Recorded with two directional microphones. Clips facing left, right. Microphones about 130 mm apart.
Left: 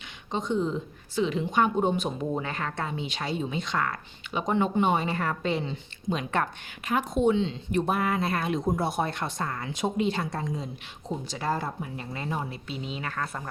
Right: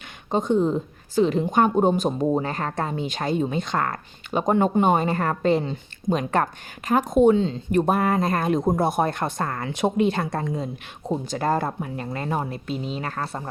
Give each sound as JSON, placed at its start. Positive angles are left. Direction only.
{"t": 0.3, "sound": "speech", "side_deg": -50}